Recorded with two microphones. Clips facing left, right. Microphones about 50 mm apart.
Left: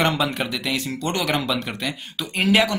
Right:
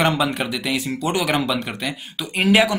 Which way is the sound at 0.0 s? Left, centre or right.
Centre.